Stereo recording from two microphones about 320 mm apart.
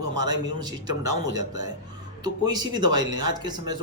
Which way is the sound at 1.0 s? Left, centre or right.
Right.